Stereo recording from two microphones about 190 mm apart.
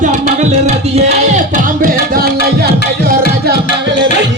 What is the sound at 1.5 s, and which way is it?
Music, 50° right (ahead or behind).